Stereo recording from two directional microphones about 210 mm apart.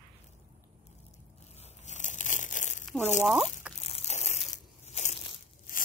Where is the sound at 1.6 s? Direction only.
35° left (ahead or behind).